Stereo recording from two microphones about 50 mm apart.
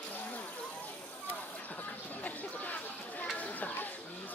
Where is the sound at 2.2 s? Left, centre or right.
Left.